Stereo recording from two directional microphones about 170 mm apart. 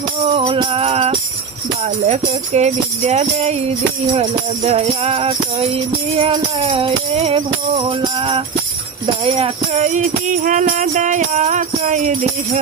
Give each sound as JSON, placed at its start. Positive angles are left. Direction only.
{"t": 0.3, "sound": "music", "side_deg": -30}